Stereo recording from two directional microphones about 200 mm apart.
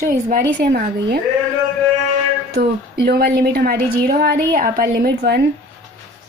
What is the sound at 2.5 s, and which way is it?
A woman's voice, 50° right (ahead or behind).